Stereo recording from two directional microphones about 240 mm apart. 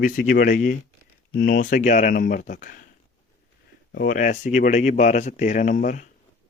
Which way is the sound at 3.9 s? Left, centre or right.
Left.